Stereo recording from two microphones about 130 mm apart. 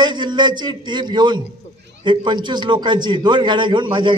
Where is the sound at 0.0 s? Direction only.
35° right (ahead or behind).